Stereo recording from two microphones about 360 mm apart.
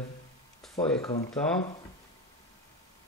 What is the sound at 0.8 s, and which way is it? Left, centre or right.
Speech, centre.